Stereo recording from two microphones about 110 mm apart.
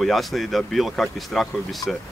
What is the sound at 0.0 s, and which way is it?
Speech, centre (ahead or behind).